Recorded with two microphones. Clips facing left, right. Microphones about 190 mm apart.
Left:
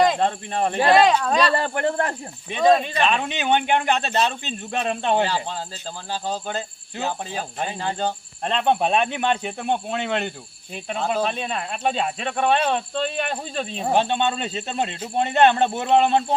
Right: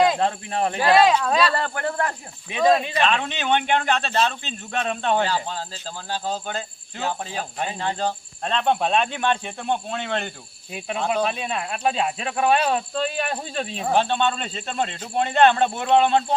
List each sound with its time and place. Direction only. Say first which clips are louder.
0.0 s speech: even; 5° right (ahead or behind)
1.5 s speech: left 3 dB; 25° left (ahead or behind)
2.5 s speech: left 1 dB; centre (ahead or behind)
3.1 s speech: left 1 dB; 10° left (ahead or behind)
8.4 s speech: left 1 dB; 15° left (ahead or behind)
10.8 s speech: even; 5° right (ahead or behind)
13.9 s speech: even; 15° left (ahead or behind)